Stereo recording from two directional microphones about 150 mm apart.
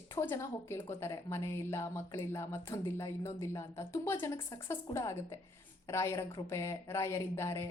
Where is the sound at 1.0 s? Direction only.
20° left (ahead or behind).